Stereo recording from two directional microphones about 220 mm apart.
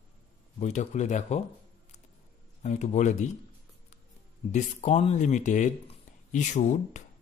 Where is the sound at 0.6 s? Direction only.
30° left (ahead or behind).